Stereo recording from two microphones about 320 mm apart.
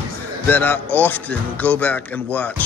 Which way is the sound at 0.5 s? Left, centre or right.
Centre.